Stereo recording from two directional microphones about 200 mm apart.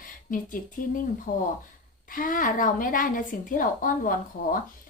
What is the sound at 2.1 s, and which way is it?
A woman's voice, 45° left (ahead or behind).